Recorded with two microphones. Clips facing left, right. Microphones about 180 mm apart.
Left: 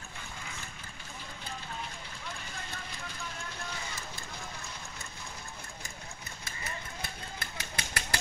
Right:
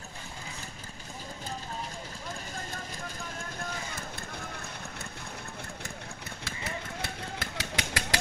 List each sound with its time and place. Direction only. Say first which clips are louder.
6.4 s vehicle: right 5 dB; 85° right